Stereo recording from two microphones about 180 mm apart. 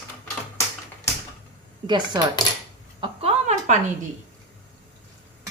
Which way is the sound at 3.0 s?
35° right (ahead or behind).